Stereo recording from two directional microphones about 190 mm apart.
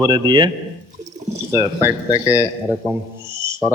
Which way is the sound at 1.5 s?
15° right (ahead or behind).